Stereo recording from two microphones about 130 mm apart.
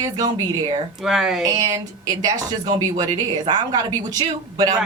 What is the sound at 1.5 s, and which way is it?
A man's voice, 30° right (ahead or behind).